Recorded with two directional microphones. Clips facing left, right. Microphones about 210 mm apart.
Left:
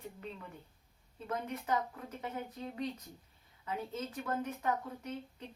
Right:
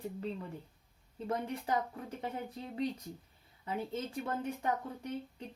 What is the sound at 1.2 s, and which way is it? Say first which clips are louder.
Speech: right 2 dB; 30° right (ahead or behind).